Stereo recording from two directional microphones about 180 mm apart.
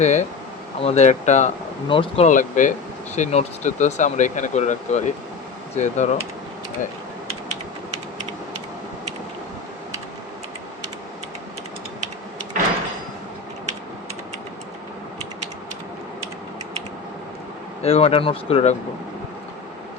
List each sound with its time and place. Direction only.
0.0 s speech: 40° left (ahead or behind)
17.8 s speech: 35° left (ahead or behind)